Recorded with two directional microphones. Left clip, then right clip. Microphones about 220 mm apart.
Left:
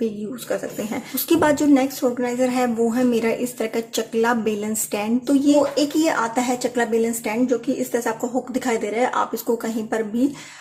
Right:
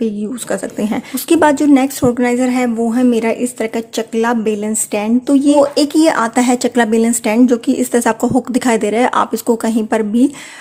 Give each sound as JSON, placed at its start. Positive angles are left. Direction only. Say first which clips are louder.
{"t": 0.0, "sound": "a woman's voice", "louder": "right 6 dB", "side_deg": -40}
{"t": 5.7, "sound": "speech", "louder": "right 8 dB", "side_deg": -50}